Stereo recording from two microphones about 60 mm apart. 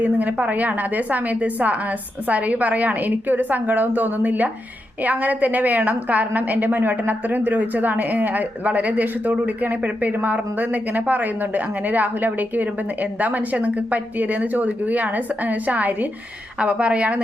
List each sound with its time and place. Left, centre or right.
0.0 s speech: right